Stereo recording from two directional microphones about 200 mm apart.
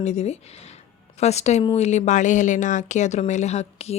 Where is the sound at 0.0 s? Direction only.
35° left (ahead or behind).